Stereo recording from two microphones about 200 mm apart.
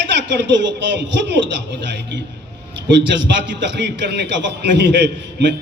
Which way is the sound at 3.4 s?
60° right (ahead or behind).